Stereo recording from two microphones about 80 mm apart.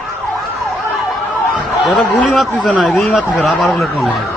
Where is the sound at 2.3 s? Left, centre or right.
Centre.